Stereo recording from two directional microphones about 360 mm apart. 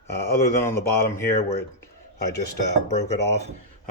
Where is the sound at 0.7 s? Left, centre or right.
Centre.